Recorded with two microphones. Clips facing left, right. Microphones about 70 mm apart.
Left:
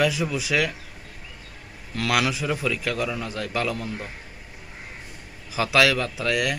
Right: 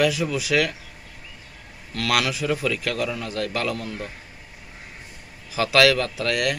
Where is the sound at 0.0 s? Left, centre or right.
Centre.